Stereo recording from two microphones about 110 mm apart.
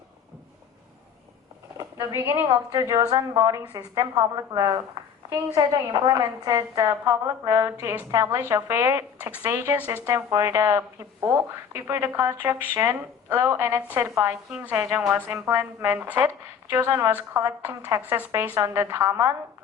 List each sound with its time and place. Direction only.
1.8 s speech: 30° right (ahead or behind)
2.5 s a woman's voice: 35° right (ahead or behind)
5.9 s a woman's voice: 40° right (ahead or behind); by 19.3 s 25° right (ahead or behind)